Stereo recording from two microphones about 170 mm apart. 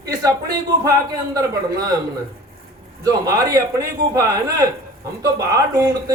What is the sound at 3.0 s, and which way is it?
A man's voice, 20° right (ahead or behind).